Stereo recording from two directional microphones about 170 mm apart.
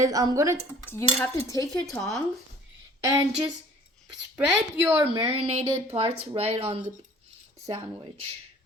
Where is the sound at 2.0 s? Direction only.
Centre (ahead or behind).